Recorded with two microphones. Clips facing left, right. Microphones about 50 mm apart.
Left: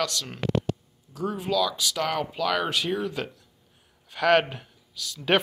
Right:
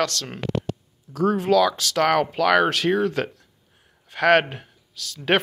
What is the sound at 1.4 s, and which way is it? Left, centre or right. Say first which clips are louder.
Speech: right 5 dB; right.